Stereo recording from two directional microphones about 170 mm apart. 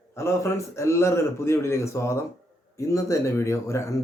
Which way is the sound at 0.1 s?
15° left (ahead or behind).